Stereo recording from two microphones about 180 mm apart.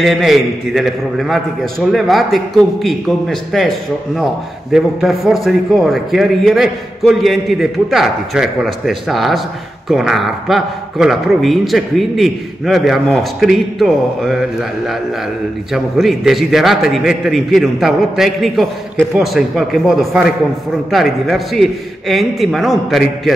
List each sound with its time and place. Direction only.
0.0 s a man's voice: centre (ahead or behind)
4.7 s a man's voice: centre (ahead or behind)
15.7 s a man's voice: centre (ahead or behind)